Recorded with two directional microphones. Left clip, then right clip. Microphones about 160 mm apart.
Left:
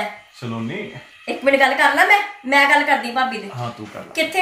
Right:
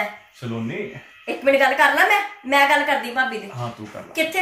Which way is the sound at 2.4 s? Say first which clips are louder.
Left 2 dB; 10° left (ahead or behind).